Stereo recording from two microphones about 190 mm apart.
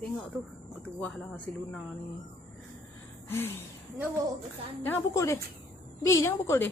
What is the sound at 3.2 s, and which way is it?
Gasp, 10° left (ahead or behind).